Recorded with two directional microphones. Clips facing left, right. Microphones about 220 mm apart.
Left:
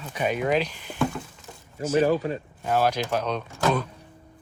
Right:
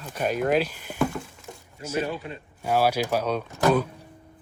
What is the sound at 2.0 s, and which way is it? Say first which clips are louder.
Speech: left 9 dB; 40° left (ahead or behind).